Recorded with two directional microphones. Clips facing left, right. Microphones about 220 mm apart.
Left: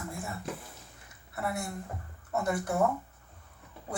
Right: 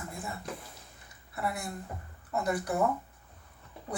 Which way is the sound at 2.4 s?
25° left (ahead or behind).